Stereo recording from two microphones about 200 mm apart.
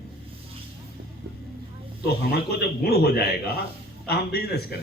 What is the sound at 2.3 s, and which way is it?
A man's voice, 55° left (ahead or behind).